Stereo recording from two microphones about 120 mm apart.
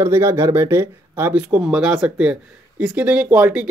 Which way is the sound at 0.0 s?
25° right (ahead or behind).